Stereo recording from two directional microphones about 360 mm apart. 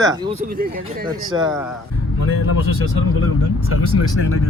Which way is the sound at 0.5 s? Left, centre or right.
Right.